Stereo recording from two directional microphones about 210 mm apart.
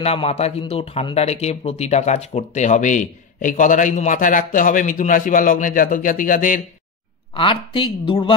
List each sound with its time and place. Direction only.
0.0 s a man's voice: 30° left (ahead or behind)
7.3 s speech: 25° left (ahead or behind)